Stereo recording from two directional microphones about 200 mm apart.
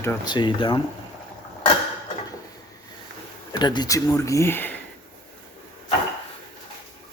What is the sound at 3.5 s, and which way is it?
Speech, 20° left (ahead or behind).